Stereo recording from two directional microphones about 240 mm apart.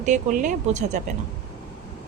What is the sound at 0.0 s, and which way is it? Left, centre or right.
Speech, right.